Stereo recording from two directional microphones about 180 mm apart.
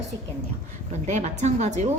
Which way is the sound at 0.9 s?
40° right (ahead or behind).